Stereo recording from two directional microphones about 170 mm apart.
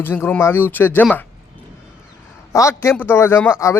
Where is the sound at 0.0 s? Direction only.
10° left (ahead or behind).